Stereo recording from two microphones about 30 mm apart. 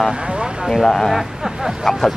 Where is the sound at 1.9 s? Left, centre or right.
Centre.